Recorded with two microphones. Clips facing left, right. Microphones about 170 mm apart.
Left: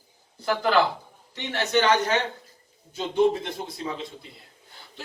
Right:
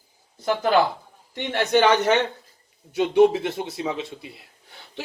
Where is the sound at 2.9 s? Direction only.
75° right (ahead or behind).